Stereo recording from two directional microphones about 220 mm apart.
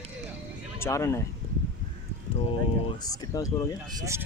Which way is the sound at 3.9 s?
15° right (ahead or behind).